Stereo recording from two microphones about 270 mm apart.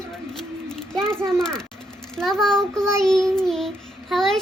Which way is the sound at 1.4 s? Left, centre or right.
Centre.